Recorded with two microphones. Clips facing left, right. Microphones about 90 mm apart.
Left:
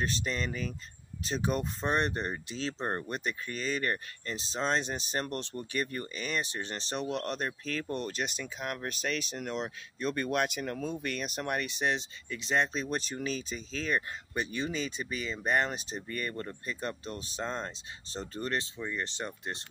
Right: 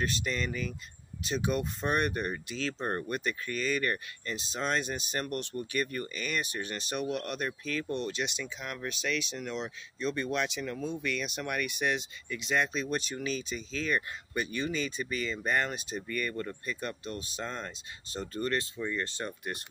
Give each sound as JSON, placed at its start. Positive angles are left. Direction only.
{"t": 0.0, "sound": "speech", "side_deg": 35}